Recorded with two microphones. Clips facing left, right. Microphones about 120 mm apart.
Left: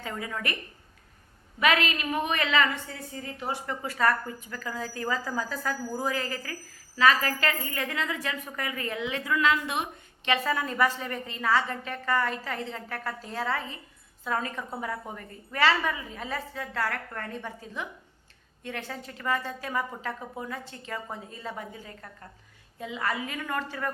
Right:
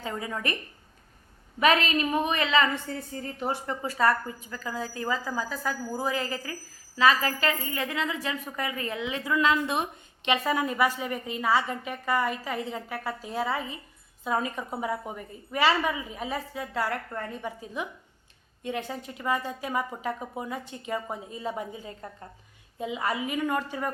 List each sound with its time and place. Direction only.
0.0 s a woman's voice: 20° right (ahead or behind)
1.5 s a woman's voice: 30° right (ahead or behind)
2.9 s a woman's voice: 45° right (ahead or behind)
3.7 s a woman's voice: 25° right (ahead or behind)
10.2 s a woman's voice: 15° right (ahead or behind)